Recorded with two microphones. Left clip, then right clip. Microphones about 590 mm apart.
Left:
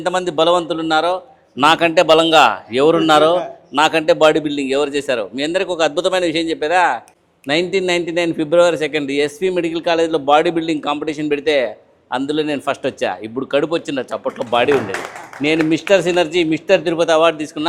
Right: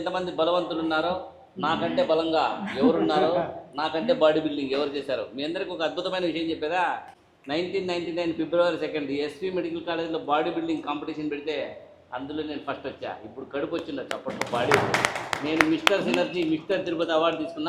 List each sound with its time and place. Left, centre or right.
0.0 s a man's voice: left
1.6 s a man's voice: left
15.9 s a man's voice: left